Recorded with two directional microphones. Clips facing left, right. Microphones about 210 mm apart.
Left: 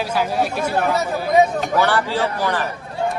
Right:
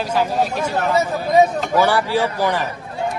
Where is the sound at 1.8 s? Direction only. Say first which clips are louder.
Right 3 dB; 15° right (ahead or behind).